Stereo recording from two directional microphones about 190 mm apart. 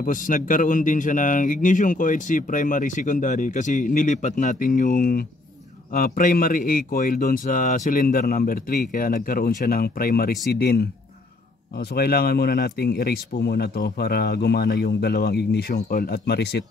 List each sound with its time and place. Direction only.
0.0 s speech: 45° left (ahead or behind)
11.9 s speech: 55° left (ahead or behind)